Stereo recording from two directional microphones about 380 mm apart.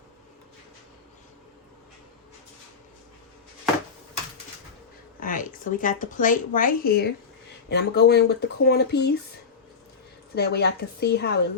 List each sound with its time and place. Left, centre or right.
5.2 s speech: left
10.3 s speech: left